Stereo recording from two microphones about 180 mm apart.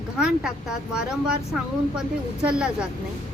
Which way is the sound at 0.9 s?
5° right (ahead or behind).